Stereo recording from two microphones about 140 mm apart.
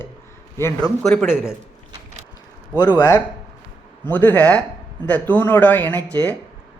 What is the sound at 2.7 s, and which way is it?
Speech, 30° left (ahead or behind).